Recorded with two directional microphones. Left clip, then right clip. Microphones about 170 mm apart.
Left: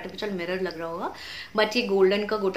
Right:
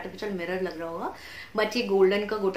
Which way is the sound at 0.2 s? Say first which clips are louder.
Left 2 dB; centre (ahead or behind).